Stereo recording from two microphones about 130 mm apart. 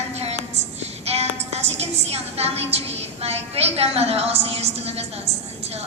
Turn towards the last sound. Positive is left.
turn(degrees=-50)  # may be behind; listen again after turning